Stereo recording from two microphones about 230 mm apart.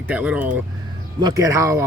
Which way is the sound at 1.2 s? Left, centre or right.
Centre.